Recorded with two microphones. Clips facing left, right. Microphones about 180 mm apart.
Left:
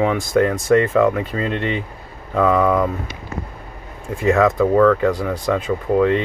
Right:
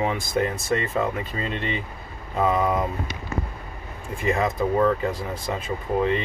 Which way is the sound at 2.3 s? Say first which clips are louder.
Left 6 dB; 90° left.